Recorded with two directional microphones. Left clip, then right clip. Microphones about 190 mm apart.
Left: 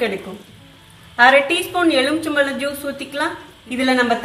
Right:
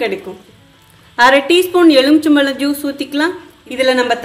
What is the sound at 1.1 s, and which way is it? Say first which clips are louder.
A woman's voice: right 3 dB; 60° right (ahead or behind).